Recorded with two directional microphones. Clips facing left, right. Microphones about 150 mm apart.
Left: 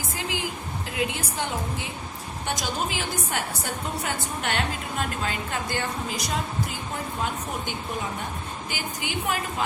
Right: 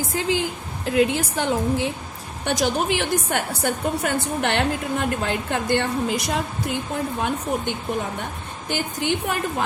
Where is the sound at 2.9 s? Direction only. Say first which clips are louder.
Right 7 dB; 70° right (ahead or behind).